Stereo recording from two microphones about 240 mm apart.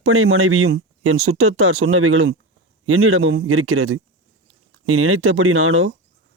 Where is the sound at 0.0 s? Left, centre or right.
Right.